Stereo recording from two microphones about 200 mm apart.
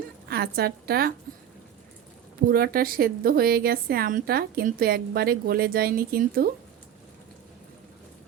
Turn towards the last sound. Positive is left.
turn(degrees=-50)  # may be behind; listen again after turning